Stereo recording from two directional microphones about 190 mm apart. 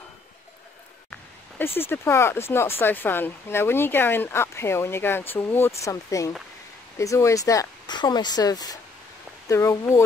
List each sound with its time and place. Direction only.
1.8 s speech: 10° left (ahead or behind)